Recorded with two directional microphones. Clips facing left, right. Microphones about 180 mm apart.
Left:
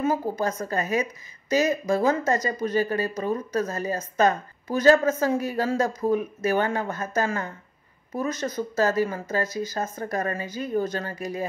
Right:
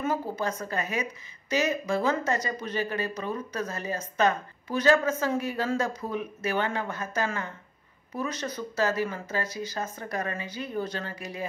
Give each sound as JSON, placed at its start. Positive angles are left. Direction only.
{"t": 0.0, "sound": "speech", "side_deg": 40}